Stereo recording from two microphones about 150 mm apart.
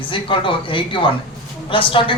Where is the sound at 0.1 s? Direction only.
35° left (ahead or behind).